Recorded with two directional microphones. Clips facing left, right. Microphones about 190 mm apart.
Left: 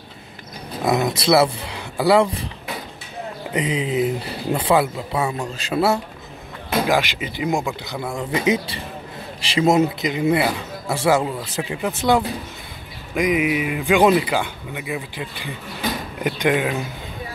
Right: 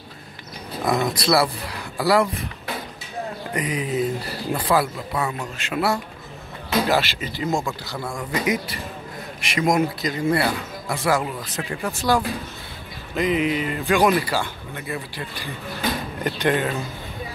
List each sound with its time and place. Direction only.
0.8 s speech: 20° left (ahead or behind)
3.5 s speech: 25° left (ahead or behind)
6.9 s speech: 15° left (ahead or behind)
13.1 s speech: 10° left (ahead or behind)